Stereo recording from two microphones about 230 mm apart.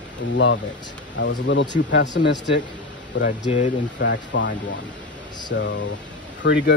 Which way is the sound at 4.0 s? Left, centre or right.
Left.